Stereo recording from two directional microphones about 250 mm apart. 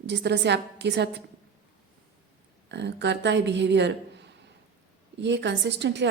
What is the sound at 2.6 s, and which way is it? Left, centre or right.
A woman's voice, right.